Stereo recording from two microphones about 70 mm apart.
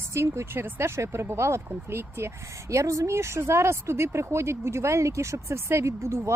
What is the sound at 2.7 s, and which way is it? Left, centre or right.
Speech, right.